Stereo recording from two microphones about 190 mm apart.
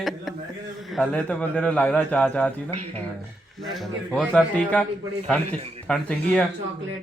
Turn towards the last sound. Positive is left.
turn(degrees=5)  # may be behind; listen again after turning